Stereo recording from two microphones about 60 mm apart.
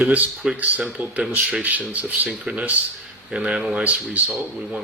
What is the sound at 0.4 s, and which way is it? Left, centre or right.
Speech, right.